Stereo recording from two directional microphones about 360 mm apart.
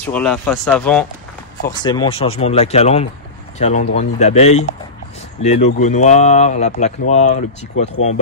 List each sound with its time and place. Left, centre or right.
0.0 s speech: centre